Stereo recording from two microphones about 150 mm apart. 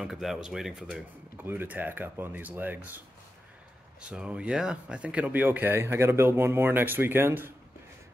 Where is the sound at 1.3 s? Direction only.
15° right (ahead or behind).